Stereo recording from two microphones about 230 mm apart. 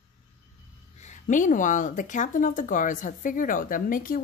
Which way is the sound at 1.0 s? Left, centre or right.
Left.